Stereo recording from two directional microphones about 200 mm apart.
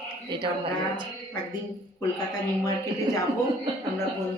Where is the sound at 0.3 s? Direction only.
25° right (ahead or behind).